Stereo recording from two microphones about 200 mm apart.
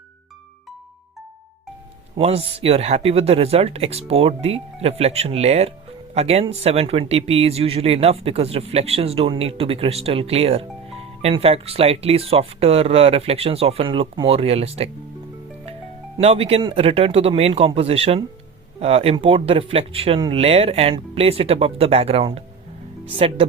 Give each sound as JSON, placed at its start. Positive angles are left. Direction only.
{"t": 2.1, "sound": "speech", "side_deg": -30}
{"t": 16.1, "sound": "speech", "side_deg": -30}